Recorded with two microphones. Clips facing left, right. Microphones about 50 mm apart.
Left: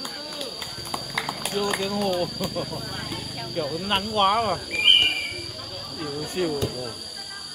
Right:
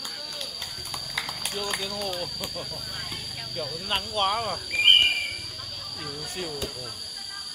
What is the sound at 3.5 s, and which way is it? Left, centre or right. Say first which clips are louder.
Speech: left 5 dB; left.